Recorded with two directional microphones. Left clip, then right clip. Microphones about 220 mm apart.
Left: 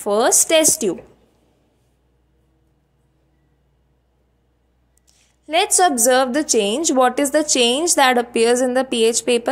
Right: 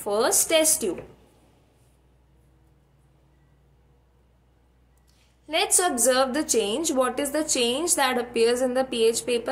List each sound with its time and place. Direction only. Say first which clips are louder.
0.0 s a woman's voice: left 7 dB; 35° left (ahead or behind)
5.0 s a woman's voice: left 7 dB; 35° left (ahead or behind)